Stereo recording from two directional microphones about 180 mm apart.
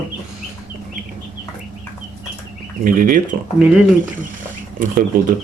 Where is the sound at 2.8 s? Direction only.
50° right (ahead or behind).